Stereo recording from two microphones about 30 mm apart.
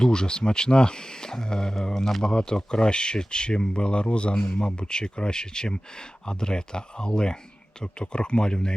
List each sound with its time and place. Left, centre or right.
0.0 s speech: left
2.3 s speech: left